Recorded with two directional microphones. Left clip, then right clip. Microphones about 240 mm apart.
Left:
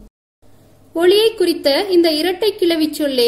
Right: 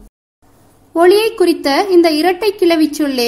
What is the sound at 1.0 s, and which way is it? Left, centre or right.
A woman's voice, right.